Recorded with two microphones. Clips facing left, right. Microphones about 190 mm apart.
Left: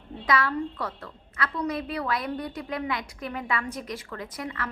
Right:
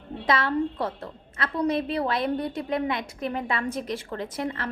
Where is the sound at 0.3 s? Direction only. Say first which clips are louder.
Right 2 dB; 25° right (ahead or behind).